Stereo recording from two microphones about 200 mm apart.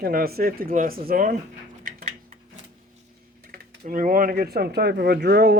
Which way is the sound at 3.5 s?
45° right (ahead or behind).